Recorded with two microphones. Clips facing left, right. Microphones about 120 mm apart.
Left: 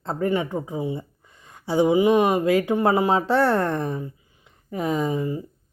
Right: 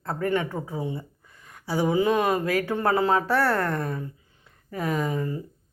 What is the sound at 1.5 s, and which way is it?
A woman's voice, 25° left (ahead or behind).